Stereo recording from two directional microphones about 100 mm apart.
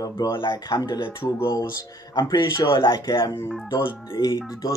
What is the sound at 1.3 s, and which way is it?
Speech, 30° left (ahead or behind).